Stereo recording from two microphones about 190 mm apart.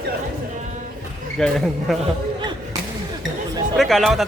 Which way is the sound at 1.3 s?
Centre (ahead or behind).